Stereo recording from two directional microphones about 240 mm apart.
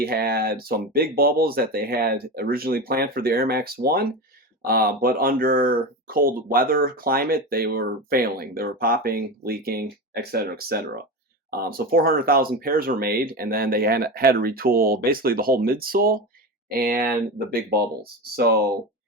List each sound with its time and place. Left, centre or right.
0.0 s speech: right